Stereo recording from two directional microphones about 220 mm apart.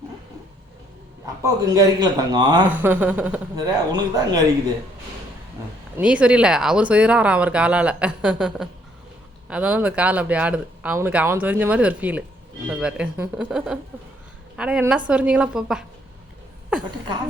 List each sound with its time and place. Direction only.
1.4 s speech: 15° right (ahead or behind)
2.6 s speech: 10° right (ahead or behind)
3.5 s speech: 15° right (ahead or behind)
6.0 s speech: 5° right (ahead or behind)